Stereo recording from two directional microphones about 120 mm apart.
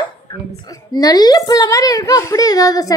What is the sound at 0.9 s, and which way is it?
A woman's voice, 35° left (ahead or behind).